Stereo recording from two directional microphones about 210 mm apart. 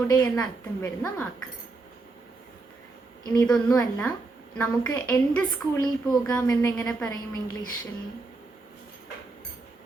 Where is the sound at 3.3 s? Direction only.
15° left (ahead or behind).